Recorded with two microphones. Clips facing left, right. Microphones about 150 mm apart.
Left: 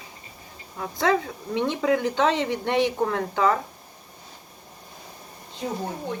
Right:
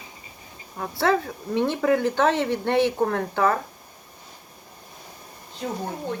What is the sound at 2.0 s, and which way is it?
Speech, 20° left (ahead or behind).